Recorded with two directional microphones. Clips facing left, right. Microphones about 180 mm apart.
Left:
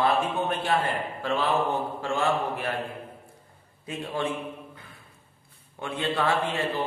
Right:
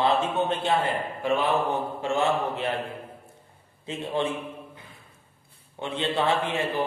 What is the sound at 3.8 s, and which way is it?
Speech, 25° right (ahead or behind).